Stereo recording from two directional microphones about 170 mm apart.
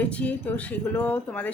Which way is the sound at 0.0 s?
10° left (ahead or behind).